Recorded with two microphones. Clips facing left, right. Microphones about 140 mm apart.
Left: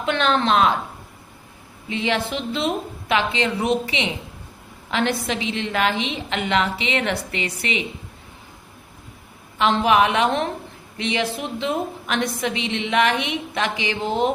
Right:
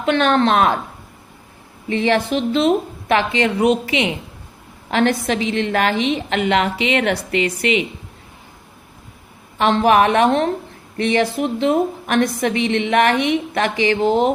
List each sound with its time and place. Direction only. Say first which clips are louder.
0.0 s a woman's voice: right 5 dB; 45° right (ahead or behind)
1.9 s a woman's voice: right 6 dB; 45° right (ahead or behind)
6.7 s a woman's voice: right 5 dB; 35° left (ahead or behind)
9.6 s a woman's voice: right 3 dB; 45° right (ahead or behind)